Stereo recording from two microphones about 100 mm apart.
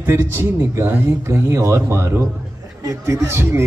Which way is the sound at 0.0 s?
25° right (ahead or behind).